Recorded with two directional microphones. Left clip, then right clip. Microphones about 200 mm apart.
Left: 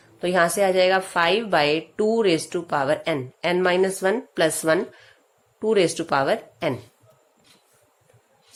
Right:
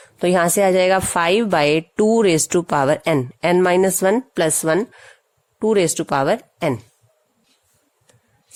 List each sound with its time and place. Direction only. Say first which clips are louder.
0.2 s a woman's voice: right 4 dB; 40° right (ahead or behind)